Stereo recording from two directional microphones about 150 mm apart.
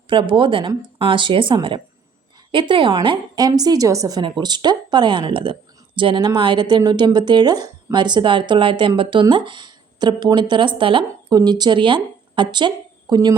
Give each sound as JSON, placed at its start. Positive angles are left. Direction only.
{"t": 0.1, "sound": "a woman's voice", "side_deg": -35}